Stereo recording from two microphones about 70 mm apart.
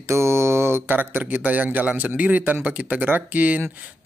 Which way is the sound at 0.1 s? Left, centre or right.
Right.